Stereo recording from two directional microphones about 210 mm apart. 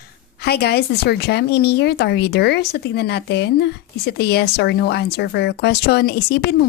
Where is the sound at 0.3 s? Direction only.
50° left (ahead or behind).